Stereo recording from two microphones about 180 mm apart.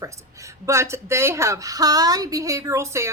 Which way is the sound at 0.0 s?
15° right (ahead or behind).